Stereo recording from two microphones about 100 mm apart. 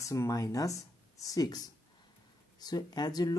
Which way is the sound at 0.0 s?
30° left (ahead or behind).